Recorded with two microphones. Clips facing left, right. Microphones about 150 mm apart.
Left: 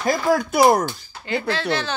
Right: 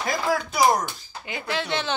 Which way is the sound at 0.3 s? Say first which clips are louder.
Left 5 dB; 55° left (ahead or behind).